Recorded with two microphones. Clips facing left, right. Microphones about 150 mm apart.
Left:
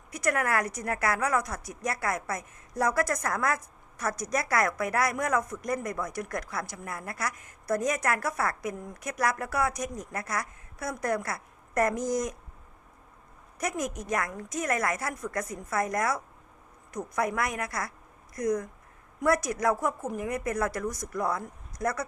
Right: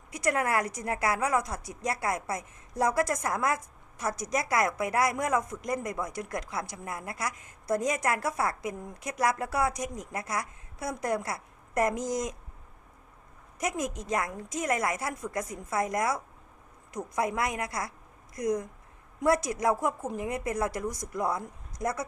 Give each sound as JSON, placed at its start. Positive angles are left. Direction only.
{"t": 0.1, "sound": "a woman's voice", "side_deg": -25}
{"t": 13.6, "sound": "a woman's voice", "side_deg": -20}